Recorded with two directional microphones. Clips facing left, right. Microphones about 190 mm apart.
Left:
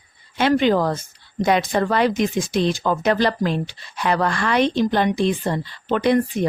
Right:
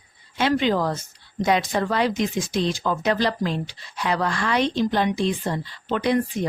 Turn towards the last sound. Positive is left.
turn(degrees=60)  # may be behind; listen again after turning